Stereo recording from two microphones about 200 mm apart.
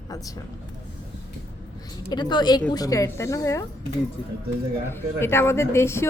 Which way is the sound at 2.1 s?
20° left (ahead or behind).